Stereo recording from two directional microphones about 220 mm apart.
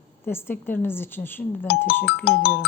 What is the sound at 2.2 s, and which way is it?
Speech, 45° left (ahead or behind).